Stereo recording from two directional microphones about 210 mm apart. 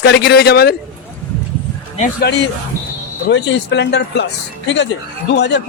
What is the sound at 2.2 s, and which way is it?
Speech, 55° left (ahead or behind).